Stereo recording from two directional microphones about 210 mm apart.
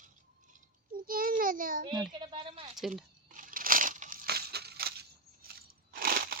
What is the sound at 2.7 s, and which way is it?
Speech, centre (ahead or behind).